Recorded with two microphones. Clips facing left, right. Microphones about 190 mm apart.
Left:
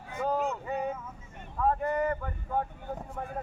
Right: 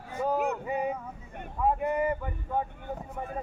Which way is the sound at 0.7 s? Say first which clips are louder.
Right 2 dB; 10° right (ahead or behind).